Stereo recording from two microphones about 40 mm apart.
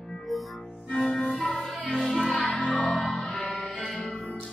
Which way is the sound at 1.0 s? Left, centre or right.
Centre.